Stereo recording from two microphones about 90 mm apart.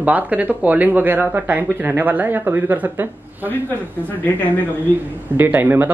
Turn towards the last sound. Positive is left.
turn(degrees=-20)  # may be behind; listen again after turning